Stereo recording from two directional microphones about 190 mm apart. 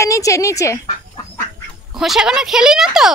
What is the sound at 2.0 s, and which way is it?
A woman's voice, centre (ahead or behind).